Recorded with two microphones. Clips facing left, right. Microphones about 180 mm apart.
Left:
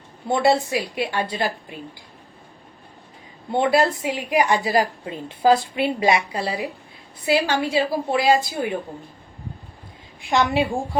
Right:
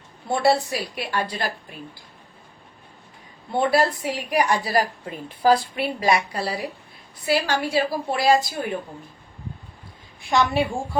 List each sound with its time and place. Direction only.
0.3 s a woman's voice: 20° left (ahead or behind)
3.6 s a woman's voice: 20° left (ahead or behind)
10.2 s a woman's voice: 15° left (ahead or behind)